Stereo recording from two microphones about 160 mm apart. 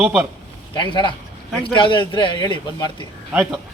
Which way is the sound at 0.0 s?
10° right (ahead or behind).